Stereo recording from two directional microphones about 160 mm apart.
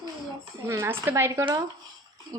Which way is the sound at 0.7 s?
15° right (ahead or behind).